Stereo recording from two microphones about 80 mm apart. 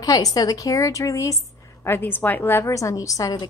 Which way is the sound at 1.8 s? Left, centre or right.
Left.